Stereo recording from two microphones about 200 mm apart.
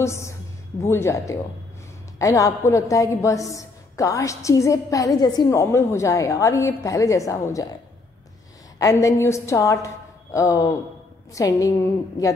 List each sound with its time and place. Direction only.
0.0 s a woman's voice: 15° left (ahead or behind)
8.7 s a woman's voice: 15° left (ahead or behind)